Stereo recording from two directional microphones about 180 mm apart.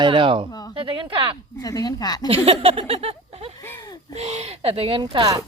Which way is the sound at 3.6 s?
15° left (ahead or behind).